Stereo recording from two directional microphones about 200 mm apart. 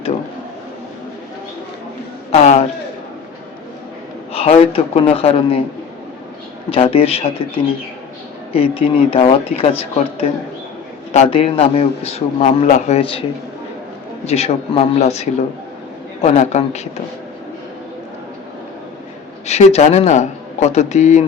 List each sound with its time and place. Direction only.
2.3 s speech: 30° left (ahead or behind)
4.3 s speech: 30° left (ahead or behind)
6.7 s speech: 30° left (ahead or behind)
8.5 s speech: 30° left (ahead or behind)
14.3 s speech: 30° left (ahead or behind)
19.5 s speech: 35° left (ahead or behind)